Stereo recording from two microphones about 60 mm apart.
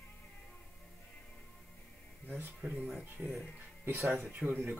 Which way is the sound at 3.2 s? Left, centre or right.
Centre.